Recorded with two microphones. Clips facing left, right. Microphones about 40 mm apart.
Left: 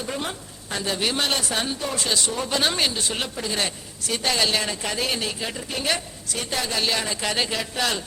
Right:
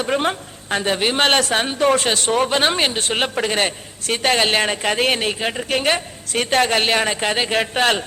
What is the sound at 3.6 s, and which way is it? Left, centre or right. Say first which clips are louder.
A woman's voice: right 6 dB; right.